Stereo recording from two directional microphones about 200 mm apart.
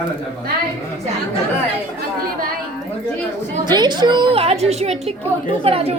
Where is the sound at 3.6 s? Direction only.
20° right (ahead or behind).